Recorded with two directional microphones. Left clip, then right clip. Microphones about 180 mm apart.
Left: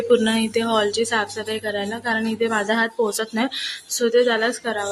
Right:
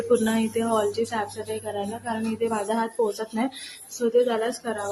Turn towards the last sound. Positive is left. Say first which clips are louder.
# left 5 dB
turn(degrees=0)  # may be behind; listen again after turning